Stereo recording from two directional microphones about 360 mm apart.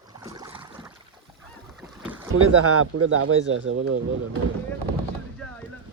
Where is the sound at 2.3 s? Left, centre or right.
Right.